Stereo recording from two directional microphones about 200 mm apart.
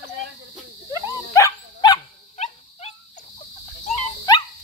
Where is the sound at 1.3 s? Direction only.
20° left (ahead or behind).